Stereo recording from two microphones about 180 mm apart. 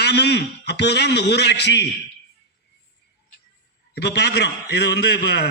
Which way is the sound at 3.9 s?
65° left (ahead or behind).